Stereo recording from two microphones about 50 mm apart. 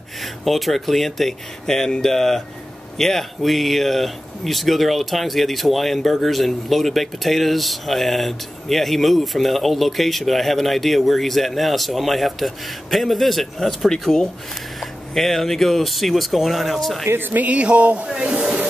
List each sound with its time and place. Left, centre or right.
0.2 s speech: centre
17.1 s speech: right
17.4 s speech: right